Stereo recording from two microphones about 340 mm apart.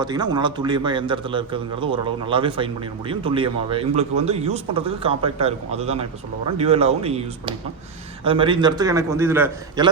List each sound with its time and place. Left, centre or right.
0.0 s a man's voice: centre